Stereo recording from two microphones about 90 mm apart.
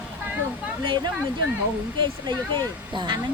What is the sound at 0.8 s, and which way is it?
Speech, 65° right (ahead or behind).